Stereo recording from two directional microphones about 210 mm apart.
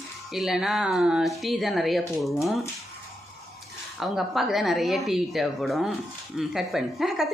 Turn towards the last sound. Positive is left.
turn(degrees=0)  # may be behind; listen again after turning